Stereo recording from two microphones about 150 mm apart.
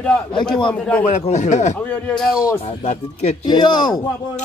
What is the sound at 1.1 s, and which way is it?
Speech, 50° left (ahead or behind).